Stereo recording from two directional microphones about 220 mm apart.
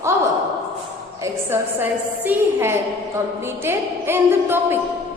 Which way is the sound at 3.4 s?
10° right (ahead or behind).